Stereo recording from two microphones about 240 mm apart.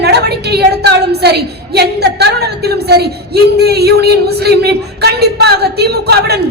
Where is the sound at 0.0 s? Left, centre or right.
Right.